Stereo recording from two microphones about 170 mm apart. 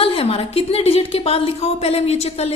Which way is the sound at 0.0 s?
35° left (ahead or behind).